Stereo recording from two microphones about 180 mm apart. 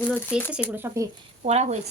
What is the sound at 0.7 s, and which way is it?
Speech, 10° right (ahead or behind).